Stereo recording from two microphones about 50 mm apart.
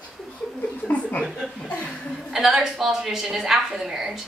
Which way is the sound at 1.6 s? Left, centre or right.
Left.